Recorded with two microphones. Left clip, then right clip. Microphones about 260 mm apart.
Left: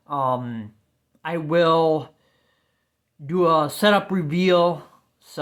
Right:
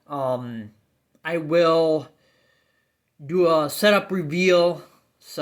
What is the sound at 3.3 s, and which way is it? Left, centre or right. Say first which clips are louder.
Speech: even; left.